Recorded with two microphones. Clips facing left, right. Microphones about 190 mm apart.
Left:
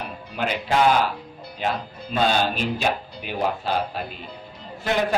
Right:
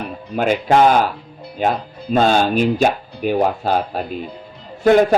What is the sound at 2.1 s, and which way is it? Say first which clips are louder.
Speech: right 7 dB; 50° right (ahead or behind).